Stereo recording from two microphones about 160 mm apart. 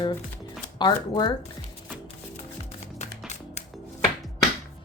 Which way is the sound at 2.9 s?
45° left (ahead or behind).